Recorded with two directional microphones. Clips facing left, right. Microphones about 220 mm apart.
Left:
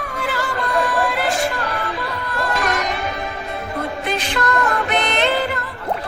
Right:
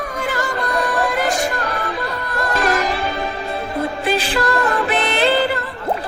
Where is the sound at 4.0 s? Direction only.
35° right (ahead or behind).